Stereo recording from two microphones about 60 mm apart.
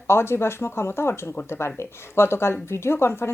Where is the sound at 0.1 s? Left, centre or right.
Left.